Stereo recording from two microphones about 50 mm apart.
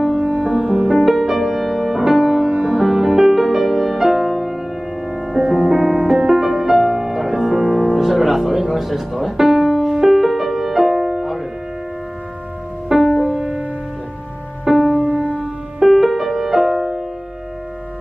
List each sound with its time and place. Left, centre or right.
0.2 s music: right
0.7 s music: centre
2.1 s music: centre
2.8 s music: centre
12.9 s music: centre
14.6 s music: centre
15.0 s music: right
15.8 s music: centre